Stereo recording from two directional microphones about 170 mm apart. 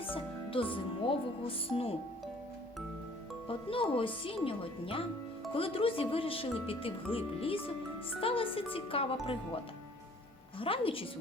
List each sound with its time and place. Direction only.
0.1 s speech: 30° left (ahead or behind)
3.7 s speech: 30° left (ahead or behind)
10.6 s speech: 30° left (ahead or behind)